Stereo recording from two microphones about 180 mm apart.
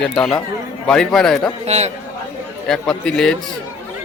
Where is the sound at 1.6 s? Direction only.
35° right (ahead or behind).